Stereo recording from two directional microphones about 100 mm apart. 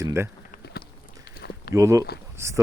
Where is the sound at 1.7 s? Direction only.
30° right (ahead or behind).